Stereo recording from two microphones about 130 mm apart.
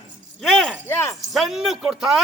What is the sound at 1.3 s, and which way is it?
Speech, centre (ahead or behind).